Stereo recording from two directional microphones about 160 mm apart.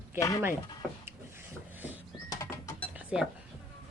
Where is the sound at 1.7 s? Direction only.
10° right (ahead or behind).